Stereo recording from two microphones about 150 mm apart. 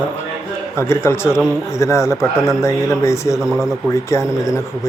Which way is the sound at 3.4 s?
5° right (ahead or behind).